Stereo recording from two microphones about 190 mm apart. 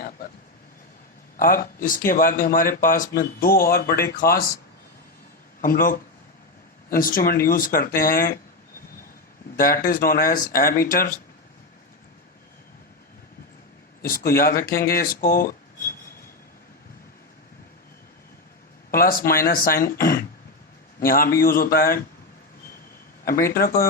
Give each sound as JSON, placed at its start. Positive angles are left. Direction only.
{"t": 1.4, "sound": "speech", "side_deg": 50}
{"t": 5.6, "sound": "speech", "side_deg": 50}
{"t": 9.6, "sound": "speech", "side_deg": 50}
{"t": 14.0, "sound": "speech", "side_deg": 50}
{"t": 18.9, "sound": "speech", "side_deg": 50}
{"t": 23.2, "sound": "speech", "side_deg": 50}